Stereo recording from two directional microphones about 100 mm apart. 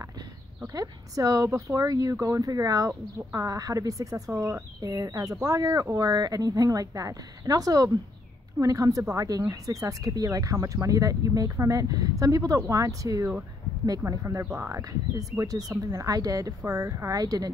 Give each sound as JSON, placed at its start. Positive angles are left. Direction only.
{"t": 0.7, "sound": "speech", "side_deg": -35}
{"t": 4.7, "sound": "speech", "side_deg": -40}